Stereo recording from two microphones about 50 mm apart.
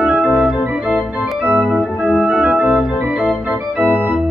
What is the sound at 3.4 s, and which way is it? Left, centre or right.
Organ, right.